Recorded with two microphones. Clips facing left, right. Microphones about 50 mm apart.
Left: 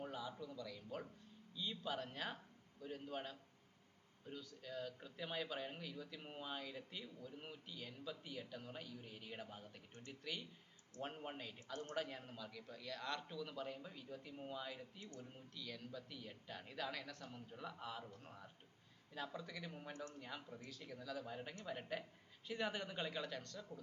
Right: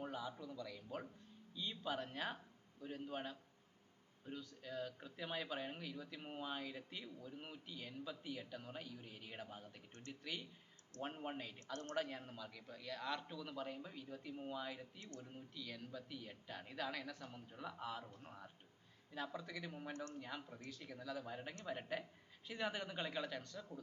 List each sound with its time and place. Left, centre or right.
0.0 s speech: centre
11.7 s a woman's voice: centre
11.9 s speech: centre